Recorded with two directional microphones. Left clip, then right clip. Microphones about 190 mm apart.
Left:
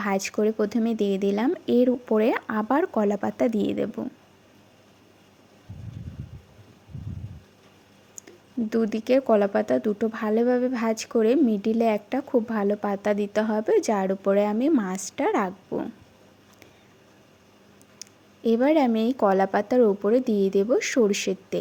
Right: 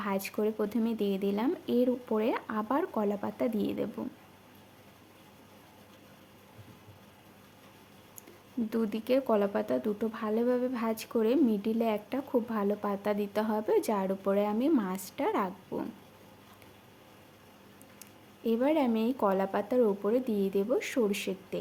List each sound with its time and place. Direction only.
0.0 s speech: 30° left (ahead or behind)
8.7 s speech: 25° left (ahead or behind)
18.0 s a sound: 30° left (ahead or behind)
18.4 s speech: 30° left (ahead or behind)